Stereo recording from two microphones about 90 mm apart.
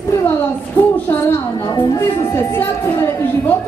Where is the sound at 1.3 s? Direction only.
40° left (ahead or behind).